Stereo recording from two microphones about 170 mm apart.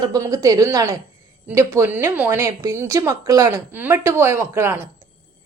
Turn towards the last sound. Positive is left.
turn(degrees=-15)  # may be behind; listen again after turning